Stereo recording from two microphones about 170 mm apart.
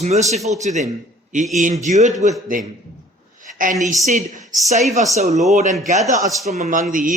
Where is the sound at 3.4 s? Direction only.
50° right (ahead or behind).